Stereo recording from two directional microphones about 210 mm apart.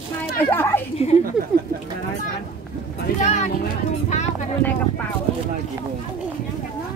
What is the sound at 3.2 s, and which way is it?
Speech, 35° left (ahead or behind).